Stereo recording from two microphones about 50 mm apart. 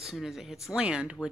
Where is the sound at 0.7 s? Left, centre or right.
Right.